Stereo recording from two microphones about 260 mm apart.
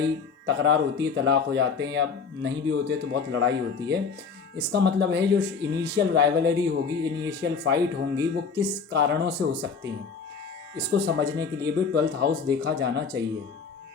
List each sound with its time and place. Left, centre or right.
0.0 s speech: right
10.8 s speech: right